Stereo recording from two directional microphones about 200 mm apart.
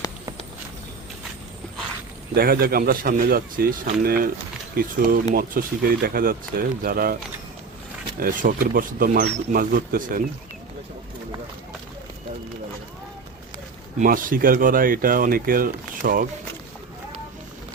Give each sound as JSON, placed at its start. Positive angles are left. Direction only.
{"t": 2.3, "sound": "speech", "side_deg": -50}
{"t": 8.2, "sound": "speech", "side_deg": -45}
{"t": 14.0, "sound": "speech", "side_deg": -45}